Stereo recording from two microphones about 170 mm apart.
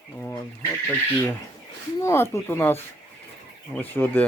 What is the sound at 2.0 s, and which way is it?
Speech, 15° left (ahead or behind).